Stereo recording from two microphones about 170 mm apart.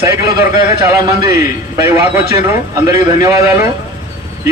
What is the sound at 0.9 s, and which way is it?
A man's voice, 20° right (ahead or behind).